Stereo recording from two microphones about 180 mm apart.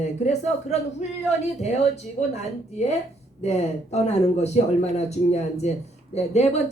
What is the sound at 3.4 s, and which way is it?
Speech, 40° left (ahead or behind).